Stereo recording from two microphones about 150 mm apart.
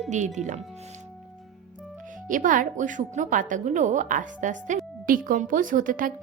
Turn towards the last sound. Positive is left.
turn(degrees=-65)  # may be behind; listen again after turning